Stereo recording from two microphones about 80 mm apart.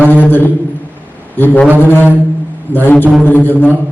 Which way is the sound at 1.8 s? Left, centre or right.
Left.